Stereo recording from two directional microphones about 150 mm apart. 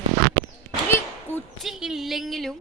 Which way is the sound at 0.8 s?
15° left (ahead or behind).